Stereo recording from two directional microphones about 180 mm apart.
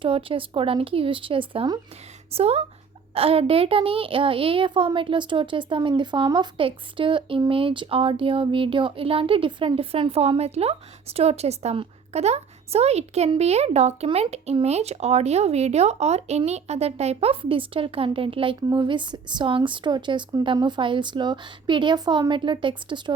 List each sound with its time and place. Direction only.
0.0 s a woman's voice: 30° right (ahead or behind)